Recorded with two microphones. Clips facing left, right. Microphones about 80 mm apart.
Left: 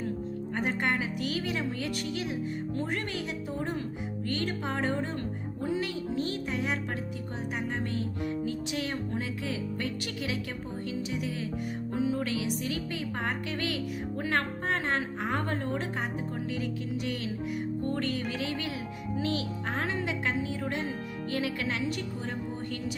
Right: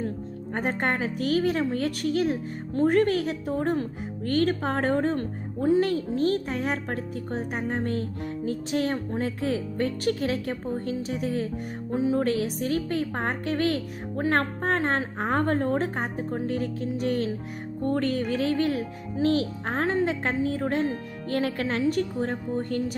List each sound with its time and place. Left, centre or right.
0.5 s a woman's voice: right